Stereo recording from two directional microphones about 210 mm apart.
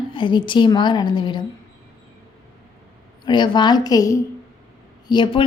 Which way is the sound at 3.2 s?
20° left (ahead or behind).